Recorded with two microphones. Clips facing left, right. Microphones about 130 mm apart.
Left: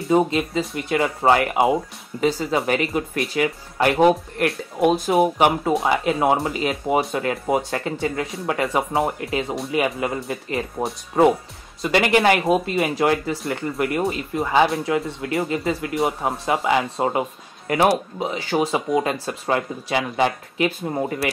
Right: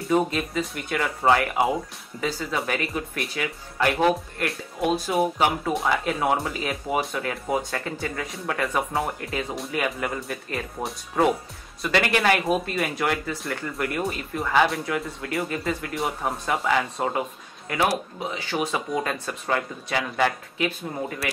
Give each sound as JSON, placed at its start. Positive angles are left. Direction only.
{"t": 0.1, "sound": "speech", "side_deg": 25}
{"t": 11.8, "sound": "speech", "side_deg": 20}